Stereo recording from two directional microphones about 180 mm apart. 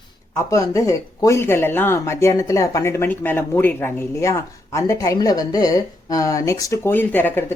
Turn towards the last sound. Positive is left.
turn(degrees=10)  # may be behind; listen again after turning